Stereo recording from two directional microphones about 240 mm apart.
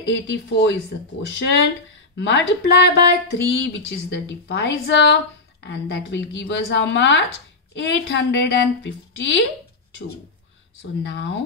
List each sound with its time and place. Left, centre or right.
0.0 s a woman's voice: left
10.8 s a woman's voice: left